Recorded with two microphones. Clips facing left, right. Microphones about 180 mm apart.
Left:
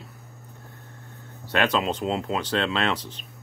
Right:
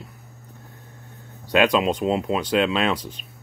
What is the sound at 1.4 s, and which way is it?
Speech, 15° right (ahead or behind).